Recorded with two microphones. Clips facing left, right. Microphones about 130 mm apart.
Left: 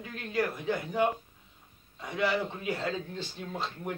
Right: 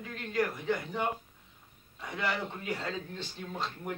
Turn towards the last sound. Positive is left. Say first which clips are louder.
# left 1 dB
turn(degrees=5)  # may be behind; listen again after turning